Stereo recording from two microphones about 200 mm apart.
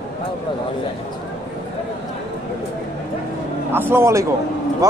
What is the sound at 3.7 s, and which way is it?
Speech, 10° right (ahead or behind).